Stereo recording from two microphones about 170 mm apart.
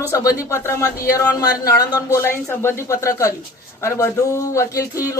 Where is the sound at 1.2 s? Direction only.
20° left (ahead or behind).